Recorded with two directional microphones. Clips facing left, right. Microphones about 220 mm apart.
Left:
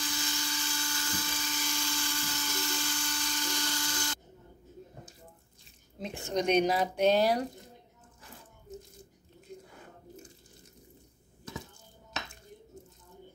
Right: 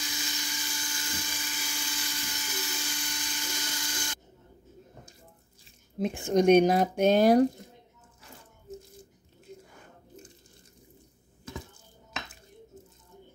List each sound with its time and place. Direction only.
0.1 s dental drill: 20° right (ahead or behind)
5.9 s speech: 50° right (ahead or behind)